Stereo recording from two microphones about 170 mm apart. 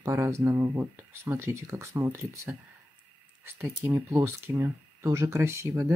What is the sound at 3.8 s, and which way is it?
Speech, 15° right (ahead or behind).